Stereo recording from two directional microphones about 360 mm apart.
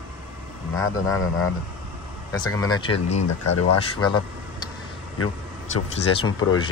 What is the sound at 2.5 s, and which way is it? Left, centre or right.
Speech, centre.